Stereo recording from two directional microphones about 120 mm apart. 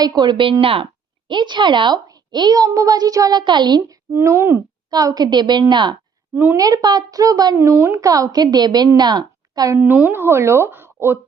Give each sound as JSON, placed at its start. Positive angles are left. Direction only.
{"t": 0.0, "sound": "a woman's voice", "side_deg": -35}
{"t": 1.3, "sound": "a woman's voice", "side_deg": -40}
{"t": 4.1, "sound": "speech", "side_deg": -20}
{"t": 4.9, "sound": "a woman's voice", "side_deg": -30}
{"t": 6.3, "sound": "a woman's voice", "side_deg": -15}
{"t": 6.6, "sound": "a woman's voice", "side_deg": -35}
{"t": 7.5, "sound": "a woman's voice", "side_deg": -20}
{"t": 9.7, "sound": "speech", "side_deg": -15}